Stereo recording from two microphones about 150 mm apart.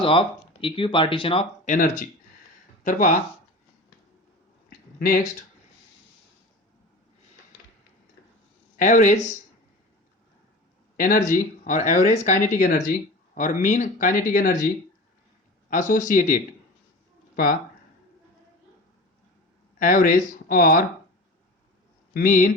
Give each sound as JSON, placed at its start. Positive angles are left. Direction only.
{"t": 0.0, "sound": "speech", "side_deg": 35}
{"t": 1.6, "sound": "speech", "side_deg": 60}
{"t": 4.7, "sound": "a sound", "side_deg": 70}
{"t": 8.8, "sound": "speech", "side_deg": 55}
{"t": 10.9, "sound": "speech", "side_deg": 60}
{"t": 15.7, "sound": "speech", "side_deg": 60}
{"t": 17.3, "sound": "speech", "side_deg": 75}
{"t": 19.8, "sound": "speech", "side_deg": 70}
{"t": 22.1, "sound": "speech", "side_deg": 70}